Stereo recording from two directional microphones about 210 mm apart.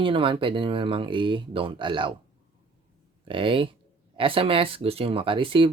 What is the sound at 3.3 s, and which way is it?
Speech, 25° right (ahead or behind).